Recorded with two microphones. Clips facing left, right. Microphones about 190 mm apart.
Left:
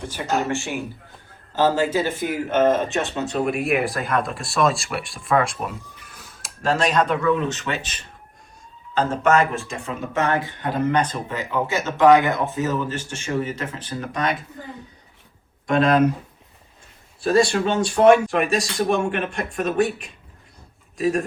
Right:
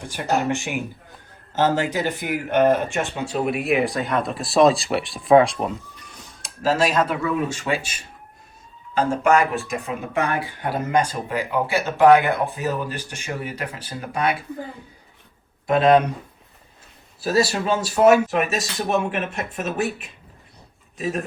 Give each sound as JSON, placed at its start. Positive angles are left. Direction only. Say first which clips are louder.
{"t": 0.1, "sound": "a man's voice", "louder": "right 2 dB", "side_deg": -15}
{"t": 15.7, "sound": "a man's voice", "louder": "right 1 dB", "side_deg": 0}
{"t": 17.2, "sound": "a man's voice", "louder": "left 3 dB", "side_deg": -5}